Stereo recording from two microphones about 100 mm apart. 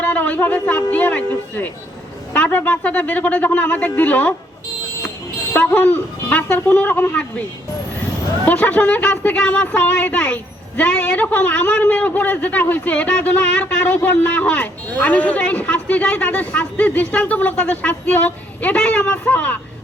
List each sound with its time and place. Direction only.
0.0 s a woman's voice: 15° left (ahead or behind)
5.5 s speech: 15° left (ahead or behind)
8.4 s a woman's voice: 15° left (ahead or behind)